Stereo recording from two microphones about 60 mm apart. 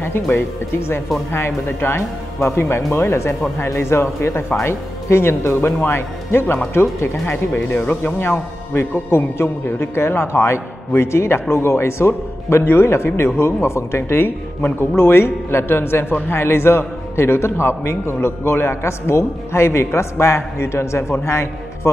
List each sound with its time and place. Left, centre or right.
0.0 s a man's voice: left
7.2 s a man's voice: left